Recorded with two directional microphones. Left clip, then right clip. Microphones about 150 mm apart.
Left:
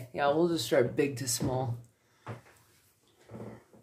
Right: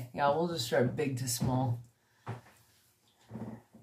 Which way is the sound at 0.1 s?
40° left (ahead or behind).